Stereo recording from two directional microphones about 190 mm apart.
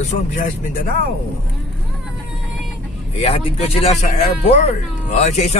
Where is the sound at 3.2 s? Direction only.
30° left (ahead or behind).